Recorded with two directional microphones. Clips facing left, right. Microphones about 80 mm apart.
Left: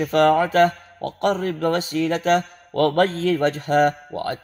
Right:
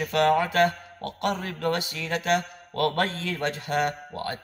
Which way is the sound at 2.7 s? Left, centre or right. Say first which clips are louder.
Left 7 dB; left.